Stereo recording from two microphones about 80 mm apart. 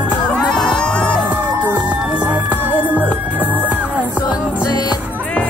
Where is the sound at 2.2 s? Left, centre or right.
Centre.